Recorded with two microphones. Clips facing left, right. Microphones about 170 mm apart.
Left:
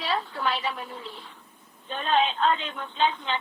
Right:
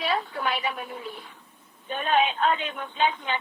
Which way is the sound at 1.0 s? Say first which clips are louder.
Right 3 dB; 50° right (ahead or behind).